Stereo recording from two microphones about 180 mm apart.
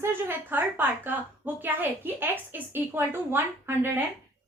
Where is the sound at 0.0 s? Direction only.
10° right (ahead or behind).